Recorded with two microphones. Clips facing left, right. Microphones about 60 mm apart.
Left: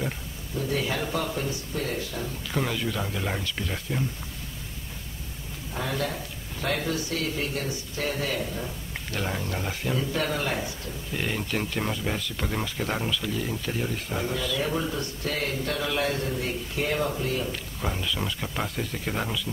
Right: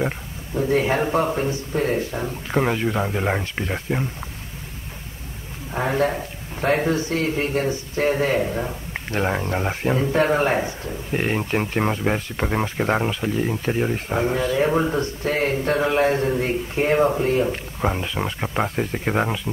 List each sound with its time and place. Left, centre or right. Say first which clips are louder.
0.6 s a man's voice: right 8 dB; right
5.8 s a man's voice: right 9 dB; right